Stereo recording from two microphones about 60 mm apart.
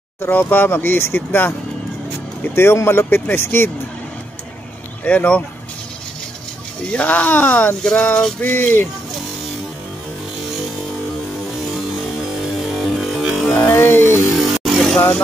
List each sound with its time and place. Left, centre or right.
0.2 s speech: left
2.5 s speech: left
5.0 s speech: left
6.9 s speech: left
8.4 s speech: left
12.5 s music: centre
13.7 s a sound: left
14.3 s vehicle: centre